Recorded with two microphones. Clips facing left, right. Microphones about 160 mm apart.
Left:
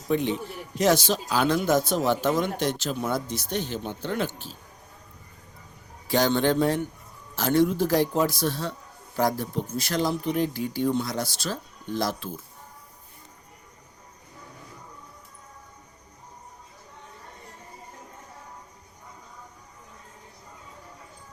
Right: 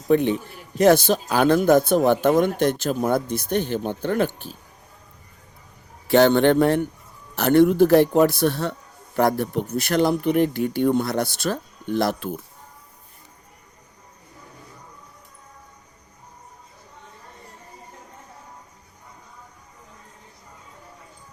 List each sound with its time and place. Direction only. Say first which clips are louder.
0.1 s a man's voice: right 6 dB; 55° right (ahead or behind)
6.1 s a man's voice: right 7 dB; 65° right (ahead or behind)